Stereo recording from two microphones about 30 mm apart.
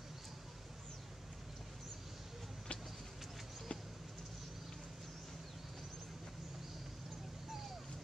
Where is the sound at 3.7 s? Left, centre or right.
Left.